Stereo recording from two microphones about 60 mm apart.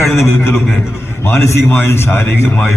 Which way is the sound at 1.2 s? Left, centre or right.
Left.